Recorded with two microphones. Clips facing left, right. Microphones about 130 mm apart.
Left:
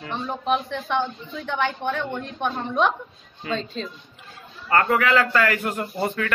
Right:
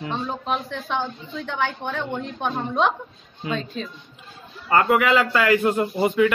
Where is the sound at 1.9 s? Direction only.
10° right (ahead or behind).